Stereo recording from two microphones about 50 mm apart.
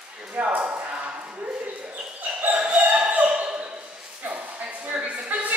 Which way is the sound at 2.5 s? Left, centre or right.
Right.